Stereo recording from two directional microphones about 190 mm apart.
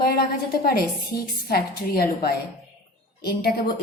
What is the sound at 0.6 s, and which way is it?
Speech, 50° left (ahead or behind).